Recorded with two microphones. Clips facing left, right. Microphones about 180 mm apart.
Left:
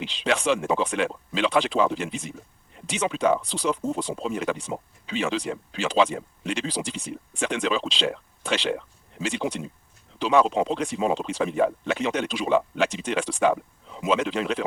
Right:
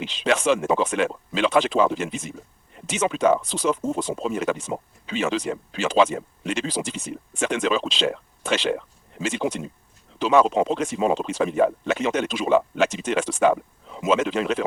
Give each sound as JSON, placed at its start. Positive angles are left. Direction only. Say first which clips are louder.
{"t": 0.0, "sound": "speech", "louder": "right 3 dB", "side_deg": -45}